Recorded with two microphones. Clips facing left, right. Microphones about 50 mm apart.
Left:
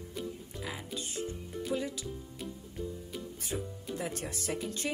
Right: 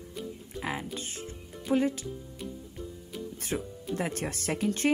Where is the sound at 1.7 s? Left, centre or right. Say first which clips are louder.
Right 9 dB; right.